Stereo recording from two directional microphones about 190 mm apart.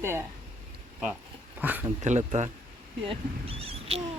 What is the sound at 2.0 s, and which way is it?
Speech, 40° right (ahead or behind).